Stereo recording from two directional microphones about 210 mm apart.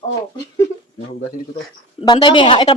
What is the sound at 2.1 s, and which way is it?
Speech, 20° left (ahead or behind).